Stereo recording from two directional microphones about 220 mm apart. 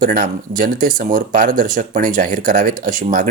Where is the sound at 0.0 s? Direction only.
40° right (ahead or behind).